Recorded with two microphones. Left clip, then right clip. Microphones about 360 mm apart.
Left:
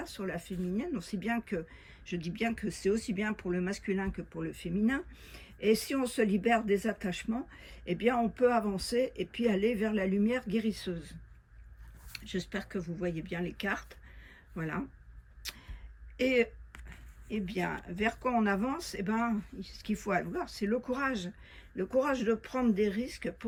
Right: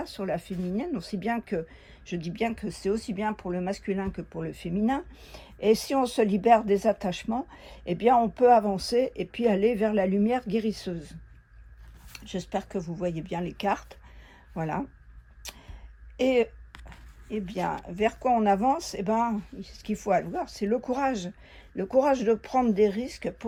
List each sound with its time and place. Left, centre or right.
0.0 s speech: centre
15.4 s a sound: centre
16.1 s speech: centre